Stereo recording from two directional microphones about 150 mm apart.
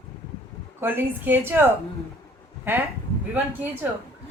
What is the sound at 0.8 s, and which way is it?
Speech, 15° right (ahead or behind).